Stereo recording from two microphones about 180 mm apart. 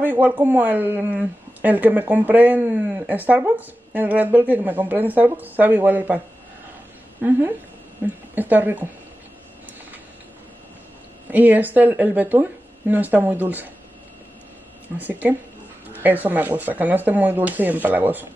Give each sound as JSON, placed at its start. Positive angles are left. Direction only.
{"t": 0.0, "sound": "speech", "side_deg": -10}
{"t": 11.2, "sound": "speech", "side_deg": -10}
{"t": 15.0, "sound": "speech", "side_deg": -10}